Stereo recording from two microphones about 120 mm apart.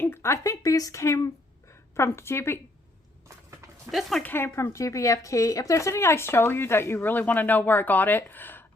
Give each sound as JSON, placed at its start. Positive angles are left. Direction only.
{"t": 0.0, "sound": "speech", "side_deg": 20}
{"t": 4.2, "sound": "speech", "side_deg": 15}